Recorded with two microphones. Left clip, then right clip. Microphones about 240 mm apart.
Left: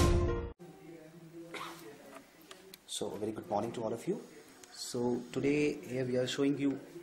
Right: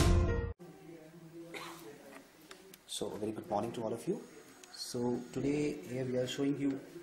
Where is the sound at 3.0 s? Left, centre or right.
Left.